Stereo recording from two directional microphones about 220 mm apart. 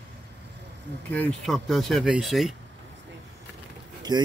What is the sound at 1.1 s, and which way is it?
Speech, 5° left (ahead or behind).